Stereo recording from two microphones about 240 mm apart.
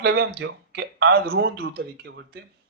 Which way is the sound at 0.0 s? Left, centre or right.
Right.